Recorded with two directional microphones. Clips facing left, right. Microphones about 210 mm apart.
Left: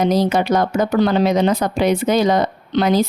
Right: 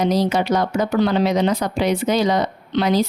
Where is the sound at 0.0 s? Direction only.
50° left (ahead or behind).